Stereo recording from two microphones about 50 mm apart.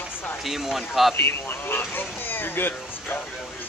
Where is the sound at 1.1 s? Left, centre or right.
Left.